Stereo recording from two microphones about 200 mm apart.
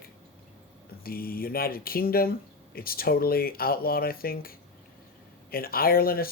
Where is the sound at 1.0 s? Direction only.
50° left (ahead or behind).